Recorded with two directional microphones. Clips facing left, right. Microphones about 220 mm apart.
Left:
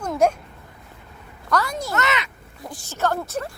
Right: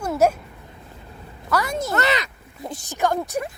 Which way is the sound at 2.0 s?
35° right (ahead or behind).